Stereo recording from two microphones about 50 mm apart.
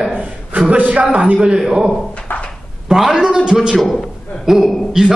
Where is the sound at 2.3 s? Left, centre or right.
Left.